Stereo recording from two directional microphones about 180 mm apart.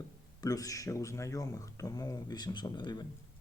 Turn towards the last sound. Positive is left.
turn(degrees=25)  # may be behind; listen again after turning